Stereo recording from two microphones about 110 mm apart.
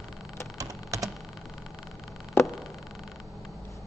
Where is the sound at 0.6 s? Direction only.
30° right (ahead or behind).